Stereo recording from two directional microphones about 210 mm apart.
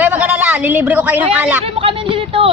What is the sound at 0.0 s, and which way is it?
A woman's voice, 5° right (ahead or behind).